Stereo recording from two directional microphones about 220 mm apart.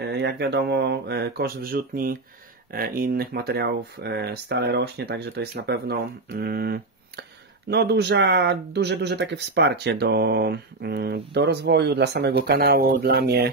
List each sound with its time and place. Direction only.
0.0 s speech: 50° right (ahead or behind)